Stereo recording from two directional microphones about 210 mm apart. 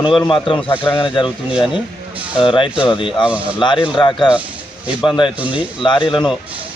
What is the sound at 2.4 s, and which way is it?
Speech, 25° left (ahead or behind).